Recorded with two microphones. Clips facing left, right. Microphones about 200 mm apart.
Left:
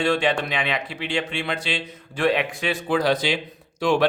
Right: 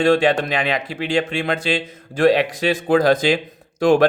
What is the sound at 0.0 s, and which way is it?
A man's voice, 45° right (ahead or behind).